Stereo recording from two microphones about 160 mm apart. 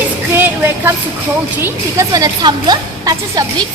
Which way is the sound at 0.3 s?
15° right (ahead or behind).